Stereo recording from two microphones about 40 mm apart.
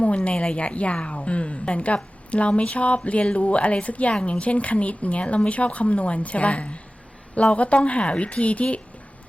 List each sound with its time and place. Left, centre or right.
0.5 s a woman's voice: left